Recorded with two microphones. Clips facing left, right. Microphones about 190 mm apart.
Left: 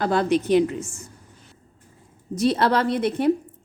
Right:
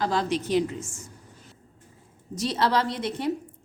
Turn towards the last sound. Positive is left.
turn(degrees=55)  # may be behind; listen again after turning